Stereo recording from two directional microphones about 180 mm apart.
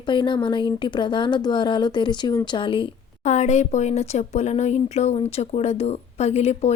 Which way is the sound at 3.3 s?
40° left (ahead or behind).